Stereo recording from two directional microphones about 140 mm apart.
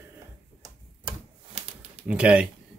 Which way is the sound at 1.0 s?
50° right (ahead or behind).